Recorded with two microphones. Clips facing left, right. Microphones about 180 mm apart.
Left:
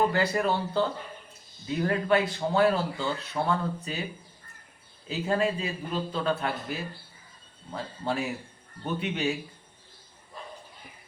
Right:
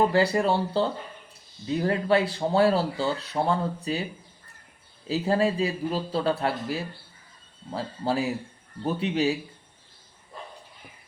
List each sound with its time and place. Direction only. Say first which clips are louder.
0.1 s speech: right 4 dB; 30° right (ahead or behind)
5.0 s speech: right 3 dB; 35° right (ahead or behind)